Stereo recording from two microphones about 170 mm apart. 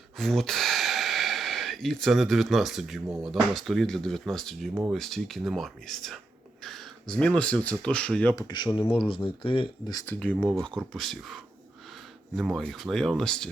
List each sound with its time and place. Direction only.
0.2 s speech: centre (ahead or behind)
8.4 s speech: 25° left (ahead or behind)
10.1 s speech: 10° left (ahead or behind)